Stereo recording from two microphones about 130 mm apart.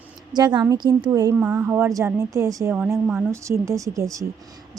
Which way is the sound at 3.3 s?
25° right (ahead or behind).